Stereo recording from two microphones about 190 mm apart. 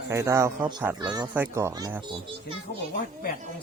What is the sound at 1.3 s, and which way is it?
A man's voice, 10° right (ahead or behind).